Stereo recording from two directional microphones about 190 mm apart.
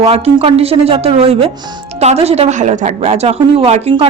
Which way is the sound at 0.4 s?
30° right (ahead or behind).